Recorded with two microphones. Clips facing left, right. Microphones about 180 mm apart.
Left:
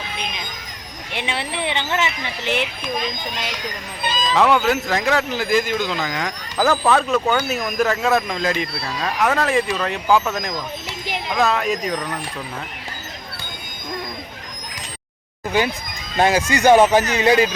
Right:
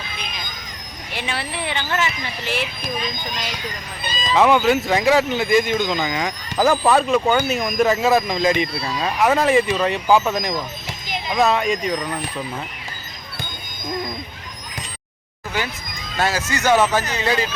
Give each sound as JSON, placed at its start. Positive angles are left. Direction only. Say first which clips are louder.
{"t": 1.1, "sound": "speech", "louder": "left 1 dB", "side_deg": 20}
{"t": 4.0, "sound": "cat", "louder": "left 2 dB", "side_deg": 80}
{"t": 4.4, "sound": "speech", "louder": "right 2 dB", "side_deg": 0}
{"t": 6.6, "sound": "speech", "louder": "right 1 dB", "side_deg": -15}
{"t": 7.1, "sound": "speech", "louder": "right 2 dB", "side_deg": -5}
{"t": 8.8, "sound": "speech", "louder": "right 2 dB", "side_deg": -10}
{"t": 11.3, "sound": "speech", "louder": "right 2 dB", "side_deg": 0}
{"t": 16.1, "sound": "speech", "louder": "left 5 dB", "side_deg": 15}